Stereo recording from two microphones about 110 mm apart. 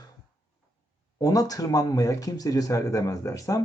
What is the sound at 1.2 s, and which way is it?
Speech, 35° left (ahead or behind).